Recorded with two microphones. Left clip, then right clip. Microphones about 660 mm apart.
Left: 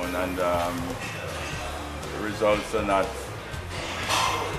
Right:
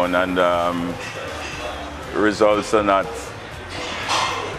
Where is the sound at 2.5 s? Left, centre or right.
Right.